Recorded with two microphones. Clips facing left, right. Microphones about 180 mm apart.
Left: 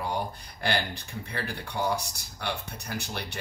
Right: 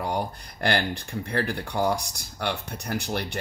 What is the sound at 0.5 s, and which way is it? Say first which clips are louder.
Speech: right 4 dB; 60° right (ahead or behind).